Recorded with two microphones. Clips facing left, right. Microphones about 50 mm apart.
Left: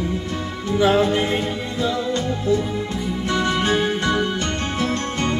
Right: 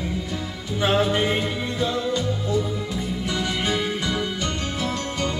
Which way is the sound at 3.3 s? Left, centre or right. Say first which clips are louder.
Left 6 dB; left.